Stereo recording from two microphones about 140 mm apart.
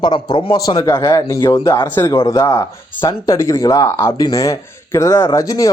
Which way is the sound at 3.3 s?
20° left (ahead or behind).